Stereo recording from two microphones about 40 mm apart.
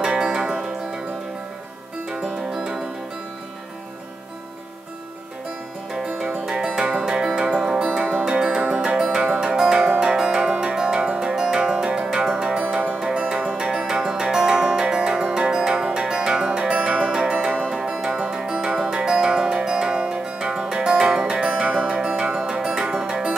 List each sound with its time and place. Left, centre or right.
0.0 s music: centre
2.2 s music: centre
6.6 s music: centre
7.8 s music: right
12.6 s music: right
17.9 s music: centre
18.5 s music: right